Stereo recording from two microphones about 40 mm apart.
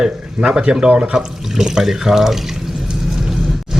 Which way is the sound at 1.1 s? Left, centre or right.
Centre.